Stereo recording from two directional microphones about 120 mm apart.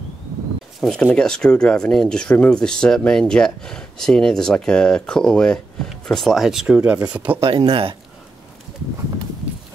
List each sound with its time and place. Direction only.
0.7 s speech: centre (ahead or behind)
7.4 s speech: 50° right (ahead or behind)